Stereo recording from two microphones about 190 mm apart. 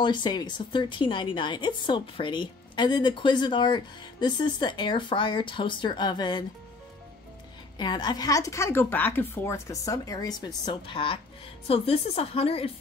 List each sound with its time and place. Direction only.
0.0 s a woman's voice: 25° left (ahead or behind)
7.7 s a woman's voice: 20° left (ahead or behind)